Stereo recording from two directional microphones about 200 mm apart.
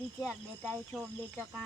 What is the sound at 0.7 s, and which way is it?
Speech, centre (ahead or behind).